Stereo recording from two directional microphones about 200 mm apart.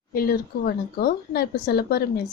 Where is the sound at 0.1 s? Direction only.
50° left (ahead or behind).